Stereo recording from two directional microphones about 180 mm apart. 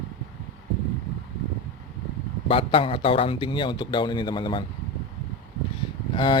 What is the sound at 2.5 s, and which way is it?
Speech, 30° left (ahead or behind).